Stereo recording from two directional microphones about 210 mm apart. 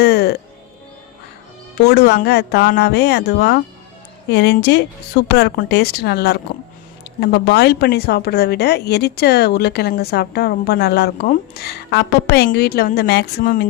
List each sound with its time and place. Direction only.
0.0 s music: 50° left (ahead or behind)
1.8 s speech: 50° left (ahead or behind)